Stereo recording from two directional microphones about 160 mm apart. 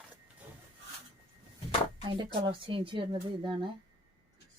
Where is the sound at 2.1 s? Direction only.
30° right (ahead or behind).